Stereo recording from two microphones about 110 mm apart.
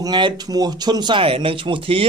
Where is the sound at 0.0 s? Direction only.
40° right (ahead or behind).